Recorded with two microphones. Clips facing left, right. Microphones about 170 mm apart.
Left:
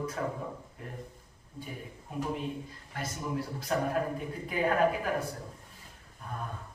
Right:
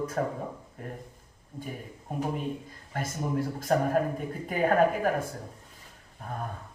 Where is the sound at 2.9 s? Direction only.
45° right (ahead or behind).